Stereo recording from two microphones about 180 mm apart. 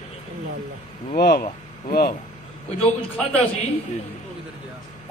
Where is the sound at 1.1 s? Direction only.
60° left (ahead or behind).